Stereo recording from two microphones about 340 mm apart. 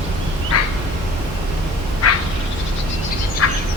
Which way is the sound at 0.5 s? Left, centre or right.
Left.